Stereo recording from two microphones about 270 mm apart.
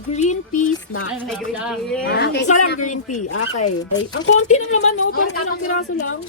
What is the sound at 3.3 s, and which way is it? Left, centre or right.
A child's voice, left.